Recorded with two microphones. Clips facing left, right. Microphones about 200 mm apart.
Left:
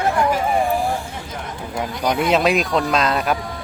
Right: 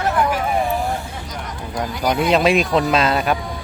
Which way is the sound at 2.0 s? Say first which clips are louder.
Right 1 dB; centre (ahead or behind).